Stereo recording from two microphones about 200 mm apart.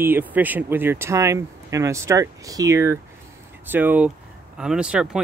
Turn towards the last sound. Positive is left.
turn(degrees=-5)  # may be behind; listen again after turning